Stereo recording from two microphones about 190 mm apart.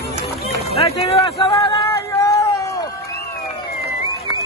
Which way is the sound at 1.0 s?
30° left (ahead or behind).